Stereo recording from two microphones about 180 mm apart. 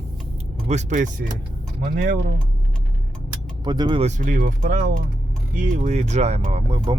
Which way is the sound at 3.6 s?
25° right (ahead or behind).